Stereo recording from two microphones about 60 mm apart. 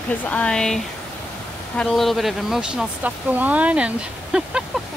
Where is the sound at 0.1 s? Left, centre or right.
Left.